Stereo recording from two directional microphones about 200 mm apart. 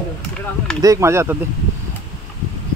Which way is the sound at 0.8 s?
15° right (ahead or behind).